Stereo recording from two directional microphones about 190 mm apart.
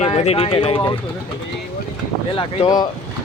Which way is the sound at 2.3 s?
25° left (ahead or behind).